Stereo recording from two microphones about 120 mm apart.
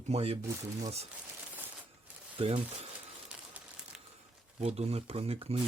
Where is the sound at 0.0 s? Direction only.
60° right (ahead or behind).